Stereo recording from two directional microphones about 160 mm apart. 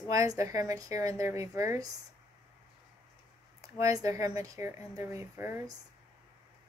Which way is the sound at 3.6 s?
20° right (ahead or behind).